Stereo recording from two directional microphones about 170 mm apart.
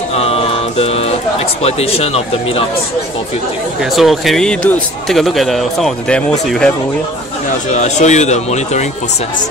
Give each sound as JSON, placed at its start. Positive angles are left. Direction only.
{"t": 0.2, "sound": "music", "side_deg": 35}
{"t": 1.6, "sound": "speech", "side_deg": 35}
{"t": 3.9, "sound": "speech", "side_deg": 0}
{"t": 7.7, "sound": "speech", "side_deg": 45}